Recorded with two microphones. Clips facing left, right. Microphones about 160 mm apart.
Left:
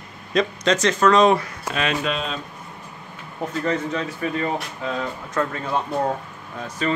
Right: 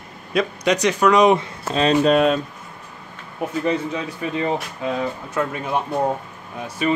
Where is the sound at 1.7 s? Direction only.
35° right (ahead or behind).